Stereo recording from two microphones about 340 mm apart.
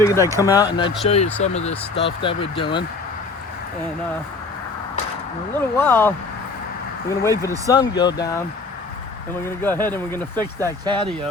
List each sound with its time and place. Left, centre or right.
0.0 s speech: centre
5.7 s speech: centre
7.2 s speech: centre
9.6 s speech: centre
10.8 s speech: centre